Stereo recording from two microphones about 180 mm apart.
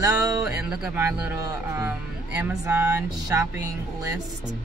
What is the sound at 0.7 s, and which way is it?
Speech, 10° right (ahead or behind).